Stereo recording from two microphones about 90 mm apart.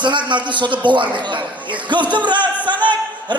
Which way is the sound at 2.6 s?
60° right (ahead or behind).